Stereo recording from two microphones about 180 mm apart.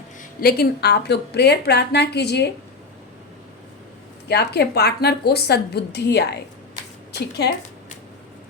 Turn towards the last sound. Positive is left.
turn(degrees=65)  # may be behind; listen again after turning